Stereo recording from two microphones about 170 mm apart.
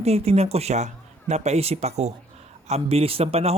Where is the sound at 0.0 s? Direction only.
35° right (ahead or behind).